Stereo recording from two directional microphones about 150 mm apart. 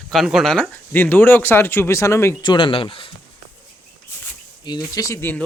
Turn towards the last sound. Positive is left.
turn(degrees=15)  # may be behind; listen again after turning